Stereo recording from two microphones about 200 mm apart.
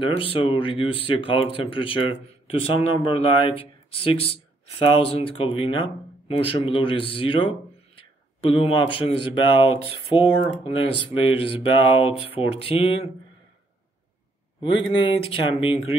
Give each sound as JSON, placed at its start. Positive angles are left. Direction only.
{"t": 0.0, "sound": "speech", "side_deg": 25}
{"t": 14.6, "sound": "speech", "side_deg": 25}